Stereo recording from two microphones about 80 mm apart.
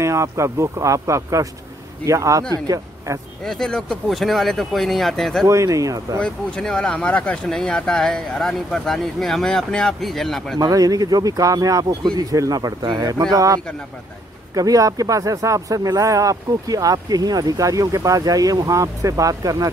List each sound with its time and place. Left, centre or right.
0.0 s speech: right
3.4 s speech: centre
5.5 s speech: right
6.2 s speech: centre
10.6 s speech: right
11.9 s speech: right